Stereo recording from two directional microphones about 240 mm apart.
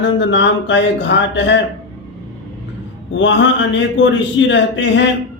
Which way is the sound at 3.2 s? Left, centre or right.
Left.